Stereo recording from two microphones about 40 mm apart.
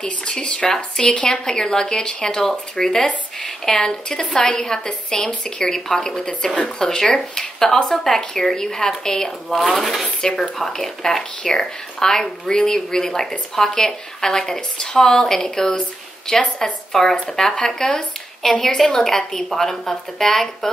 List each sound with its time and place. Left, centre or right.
0.0 s speech: left
0.7 s speech: centre
1.0 s speech: left
9.6 s speech: centre
10.2 s speech: centre